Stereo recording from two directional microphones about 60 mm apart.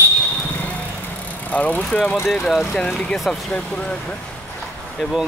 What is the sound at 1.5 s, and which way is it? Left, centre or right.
Speech, left.